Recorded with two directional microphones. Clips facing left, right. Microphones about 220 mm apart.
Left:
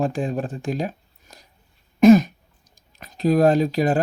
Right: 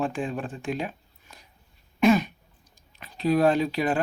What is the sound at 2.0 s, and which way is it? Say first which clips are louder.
Throat clearing: left 8 dB; 40° left (ahead or behind).